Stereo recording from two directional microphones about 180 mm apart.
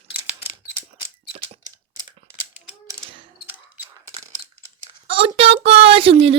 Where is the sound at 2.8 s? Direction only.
30° right (ahead or behind).